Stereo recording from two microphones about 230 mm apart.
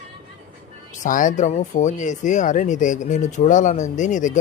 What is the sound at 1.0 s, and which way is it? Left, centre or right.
Speech, left.